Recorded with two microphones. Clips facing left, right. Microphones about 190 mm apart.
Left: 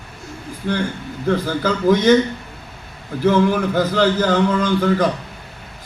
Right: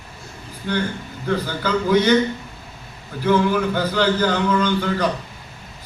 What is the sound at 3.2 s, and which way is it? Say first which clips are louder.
Speech: left 2 dB; 40° left (ahead or behind).